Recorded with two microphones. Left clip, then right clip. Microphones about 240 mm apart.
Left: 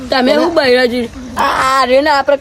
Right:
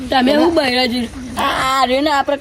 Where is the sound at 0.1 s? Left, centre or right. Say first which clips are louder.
Left 2 dB; centre.